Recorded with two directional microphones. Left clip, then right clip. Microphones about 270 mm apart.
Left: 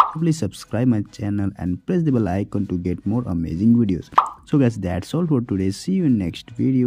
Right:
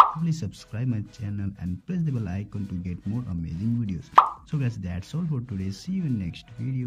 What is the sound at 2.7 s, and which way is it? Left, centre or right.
Speech, centre.